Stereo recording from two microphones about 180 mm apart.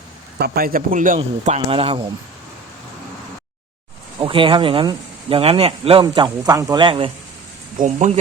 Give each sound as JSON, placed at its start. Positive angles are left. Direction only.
{"t": 0.3, "sound": "a man's voice", "side_deg": -60}
{"t": 4.2, "sound": "speech", "side_deg": -30}
{"t": 7.8, "sound": "speech", "side_deg": -40}